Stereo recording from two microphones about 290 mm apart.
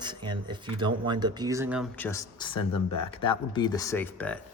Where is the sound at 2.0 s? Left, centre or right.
Centre.